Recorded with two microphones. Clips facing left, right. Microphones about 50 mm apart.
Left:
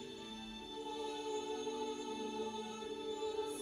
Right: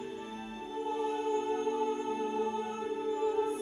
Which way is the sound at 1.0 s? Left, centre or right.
Right.